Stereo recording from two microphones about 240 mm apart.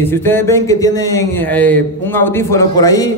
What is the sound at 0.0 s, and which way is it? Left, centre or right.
A man's voice, centre.